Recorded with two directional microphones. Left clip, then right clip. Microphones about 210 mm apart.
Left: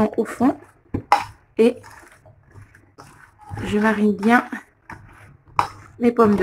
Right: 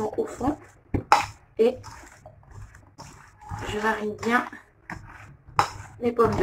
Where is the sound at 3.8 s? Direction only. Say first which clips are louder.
Left 6 dB; 55° left (ahead or behind).